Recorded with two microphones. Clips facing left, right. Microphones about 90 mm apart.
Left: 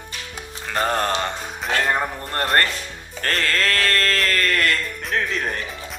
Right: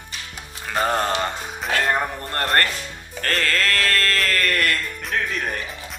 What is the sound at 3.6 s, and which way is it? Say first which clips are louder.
Sheep: left 1 dB; 25° left (ahead or behind).